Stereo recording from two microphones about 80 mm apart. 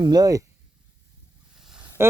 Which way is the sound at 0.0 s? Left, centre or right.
Right.